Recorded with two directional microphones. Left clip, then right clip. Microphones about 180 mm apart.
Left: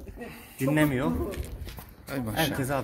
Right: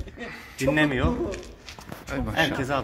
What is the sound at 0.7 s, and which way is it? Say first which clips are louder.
Speech: right 1 dB; 35° left (ahead or behind).